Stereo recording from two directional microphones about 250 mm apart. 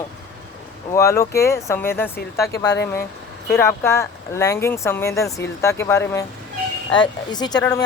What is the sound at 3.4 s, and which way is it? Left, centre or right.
Speech, centre.